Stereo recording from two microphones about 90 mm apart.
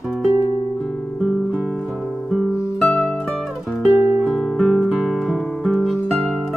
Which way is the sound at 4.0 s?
25° right (ahead or behind).